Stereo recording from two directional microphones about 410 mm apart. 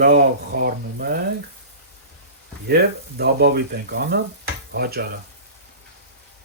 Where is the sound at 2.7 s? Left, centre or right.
Right.